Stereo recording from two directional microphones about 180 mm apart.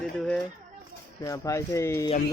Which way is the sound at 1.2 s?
15° left (ahead or behind).